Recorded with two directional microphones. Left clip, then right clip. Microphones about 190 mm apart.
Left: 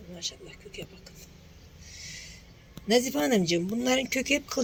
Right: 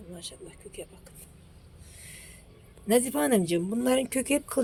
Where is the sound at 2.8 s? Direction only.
15° right (ahead or behind).